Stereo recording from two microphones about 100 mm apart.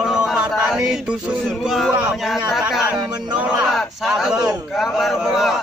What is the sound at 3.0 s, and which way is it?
Music, 45° right (ahead or behind).